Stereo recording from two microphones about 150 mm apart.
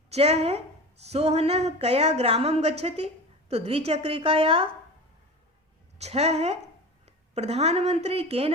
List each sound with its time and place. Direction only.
0.1 s a woman's voice: 45° right (ahead or behind)
6.0 s a woman's voice: 45° right (ahead or behind)